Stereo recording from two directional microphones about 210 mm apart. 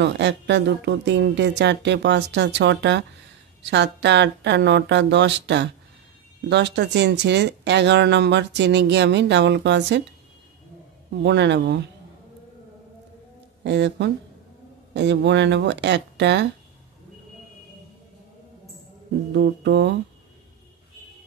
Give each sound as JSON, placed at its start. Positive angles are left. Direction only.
{"t": 0.0, "sound": "speech", "side_deg": -55}
{"t": 11.2, "sound": "speech", "side_deg": -55}
{"t": 13.7, "sound": "speech", "side_deg": -55}
{"t": 19.3, "sound": "speech", "side_deg": -55}